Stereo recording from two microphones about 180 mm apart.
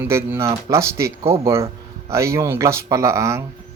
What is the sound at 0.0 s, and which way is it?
Speech, 10° right (ahead or behind).